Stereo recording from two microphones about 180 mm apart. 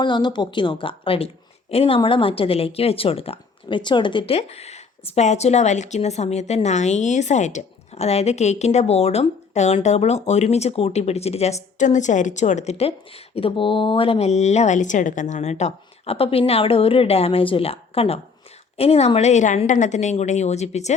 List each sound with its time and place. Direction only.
0.0 s a woman's voice: 25° left (ahead or behind)